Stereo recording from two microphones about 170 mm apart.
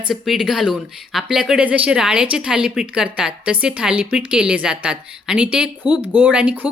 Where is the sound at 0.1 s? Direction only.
Centre (ahead or behind).